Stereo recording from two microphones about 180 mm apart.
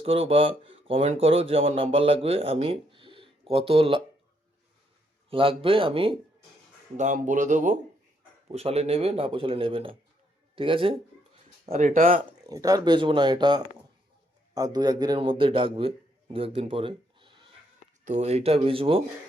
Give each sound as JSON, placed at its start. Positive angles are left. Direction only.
{"t": 0.0, "sound": "speech", "side_deg": -30}
{"t": 5.3, "sound": "speech", "side_deg": -30}
{"t": 6.9, "sound": "speech", "side_deg": -45}
{"t": 12.5, "sound": "speech", "side_deg": -20}
{"t": 18.0, "sound": "speech", "side_deg": -40}